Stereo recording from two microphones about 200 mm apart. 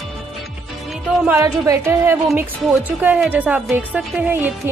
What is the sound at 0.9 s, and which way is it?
A woman's voice, 10° right (ahead or behind).